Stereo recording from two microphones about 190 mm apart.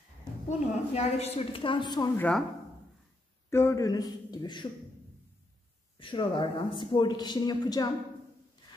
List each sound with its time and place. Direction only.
0.5 s a man's voice: 35° left (ahead or behind)
2.1 s speech: 5° left (ahead or behind)
3.4 s a man's voice: 15° left (ahead or behind)
5.9 s a man's voice: 25° left (ahead or behind)